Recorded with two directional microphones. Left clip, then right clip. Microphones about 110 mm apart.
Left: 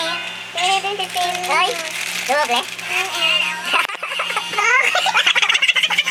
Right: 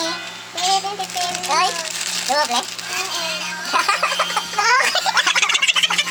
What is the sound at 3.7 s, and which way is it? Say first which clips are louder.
Baby laughter: right 5 dB; 5° left (ahead or behind).